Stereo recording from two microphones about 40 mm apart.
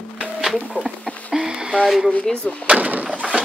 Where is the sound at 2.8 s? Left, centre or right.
Right.